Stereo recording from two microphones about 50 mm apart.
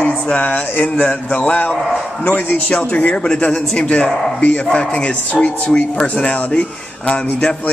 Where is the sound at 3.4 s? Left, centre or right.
Left.